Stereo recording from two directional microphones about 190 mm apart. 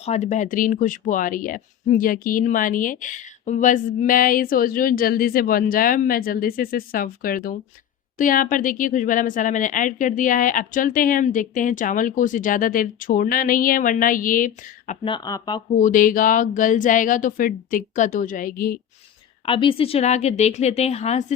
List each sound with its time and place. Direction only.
0.0 s speech: 35° left (ahead or behind)
15.0 s speech: 25° left (ahead or behind)
15.7 s speech: 40° left (ahead or behind)
19.5 s a woman's voice: 30° left (ahead or behind)